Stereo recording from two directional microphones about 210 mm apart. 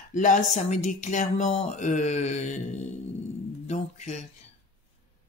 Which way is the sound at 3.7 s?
35° left (ahead or behind).